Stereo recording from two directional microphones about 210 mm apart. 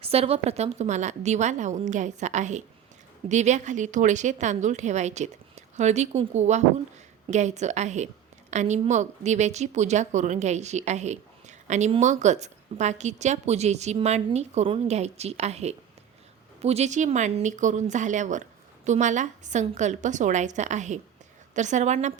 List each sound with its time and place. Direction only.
0.0 s a woman's voice: 30° right (ahead or behind)